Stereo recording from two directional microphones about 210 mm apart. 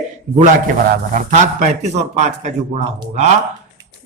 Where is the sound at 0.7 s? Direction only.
40° right (ahead or behind).